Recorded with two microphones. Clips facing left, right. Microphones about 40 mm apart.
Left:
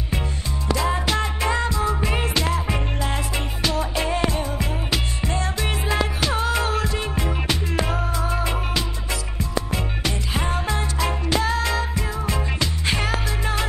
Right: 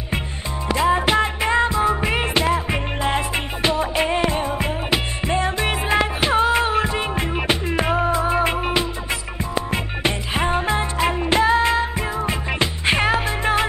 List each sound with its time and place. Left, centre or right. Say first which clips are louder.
0.7 s music: right 5 dB; right